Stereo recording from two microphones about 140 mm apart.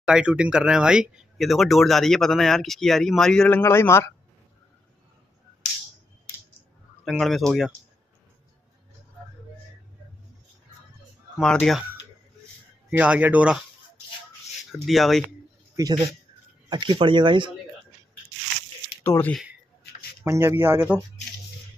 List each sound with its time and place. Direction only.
0.0 s speech: 5° right (ahead or behind); by 4.1 s 20° left (ahead or behind)
7.1 s speech: centre (ahead or behind)
11.3 s speech: 5° left (ahead or behind)
12.9 s a man's voice: 10° right (ahead or behind)
14.7 s speech: centre (ahead or behind)
15.7 s speech: 25° right (ahead or behind)
19.0 s speech: 15° left (ahead or behind)
20.2 s a man's voice: 20° right (ahead or behind)